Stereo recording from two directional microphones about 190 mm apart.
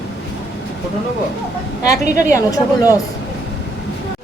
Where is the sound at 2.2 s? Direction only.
15° left (ahead or behind).